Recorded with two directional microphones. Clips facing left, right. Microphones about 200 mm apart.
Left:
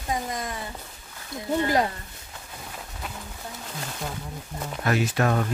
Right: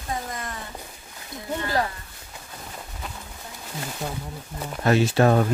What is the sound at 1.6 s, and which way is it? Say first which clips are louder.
Speech: left 2 dB; 20° left (ahead or behind).